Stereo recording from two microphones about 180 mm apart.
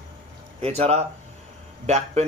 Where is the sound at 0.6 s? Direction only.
35° right (ahead or behind).